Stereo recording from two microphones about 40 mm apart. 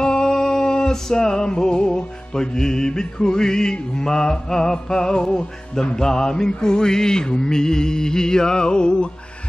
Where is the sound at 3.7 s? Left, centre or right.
Centre.